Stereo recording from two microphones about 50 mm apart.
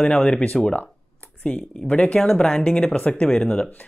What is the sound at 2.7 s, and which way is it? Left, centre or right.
Speech, left.